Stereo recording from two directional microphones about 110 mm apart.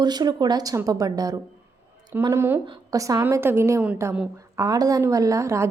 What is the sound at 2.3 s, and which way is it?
Speech, 20° right (ahead or behind).